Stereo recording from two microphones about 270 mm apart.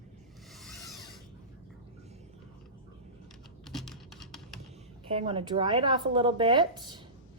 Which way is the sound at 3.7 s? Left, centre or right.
Centre.